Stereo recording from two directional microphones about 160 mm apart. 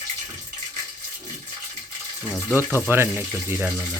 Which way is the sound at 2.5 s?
15° left (ahead or behind).